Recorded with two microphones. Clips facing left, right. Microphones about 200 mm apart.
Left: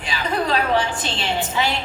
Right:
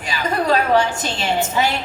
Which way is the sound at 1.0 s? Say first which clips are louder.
Right 3 dB; 45° right (ahead or behind).